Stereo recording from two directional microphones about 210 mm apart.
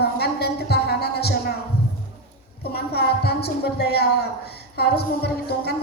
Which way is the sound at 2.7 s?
50° left (ahead or behind).